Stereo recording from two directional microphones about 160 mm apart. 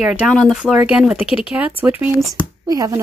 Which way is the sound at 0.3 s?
Centre (ahead or behind).